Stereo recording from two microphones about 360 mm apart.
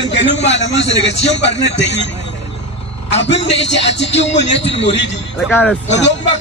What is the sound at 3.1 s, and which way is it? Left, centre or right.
A man's voice, left.